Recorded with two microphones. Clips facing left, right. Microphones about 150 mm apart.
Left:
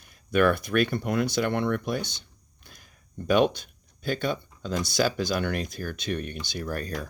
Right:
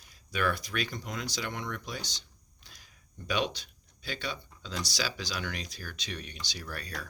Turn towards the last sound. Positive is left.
turn(degrees=45)  # may be behind; listen again after turning